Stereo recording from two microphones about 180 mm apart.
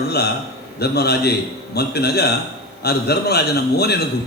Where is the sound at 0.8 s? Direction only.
65° left (ahead or behind).